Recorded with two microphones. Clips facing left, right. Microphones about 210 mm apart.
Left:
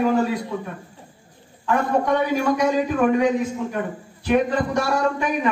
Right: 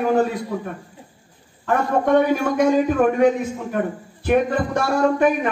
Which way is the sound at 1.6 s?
50° right (ahead or behind).